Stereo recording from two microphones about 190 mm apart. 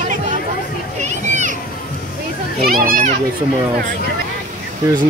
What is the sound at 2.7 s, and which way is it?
Speech, 50° right (ahead or behind).